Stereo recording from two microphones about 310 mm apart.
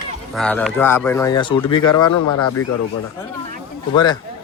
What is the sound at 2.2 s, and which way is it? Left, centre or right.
Speech, left.